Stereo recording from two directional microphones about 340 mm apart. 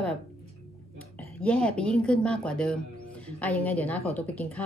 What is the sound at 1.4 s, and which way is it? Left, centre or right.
A woman's voice, centre.